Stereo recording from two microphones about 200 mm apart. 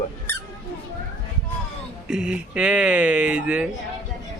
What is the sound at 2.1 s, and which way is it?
A man's voice, 5° right (ahead or behind).